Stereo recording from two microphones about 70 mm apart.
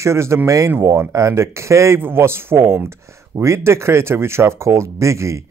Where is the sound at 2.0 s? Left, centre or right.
Right.